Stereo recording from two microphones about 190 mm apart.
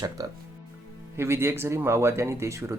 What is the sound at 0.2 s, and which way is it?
Speech, 20° right (ahead or behind).